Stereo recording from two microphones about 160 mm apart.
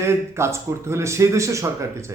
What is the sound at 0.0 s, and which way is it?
A man's voice, 15° right (ahead or behind).